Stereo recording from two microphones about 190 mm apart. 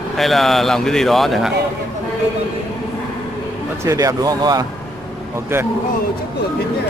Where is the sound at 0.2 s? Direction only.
Centre (ahead or behind).